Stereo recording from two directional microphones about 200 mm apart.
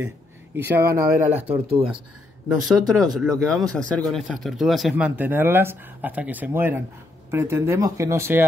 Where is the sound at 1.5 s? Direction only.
30° right (ahead or behind).